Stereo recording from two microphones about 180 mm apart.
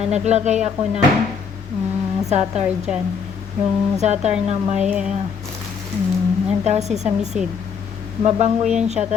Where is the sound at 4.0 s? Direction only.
40° right (ahead or behind).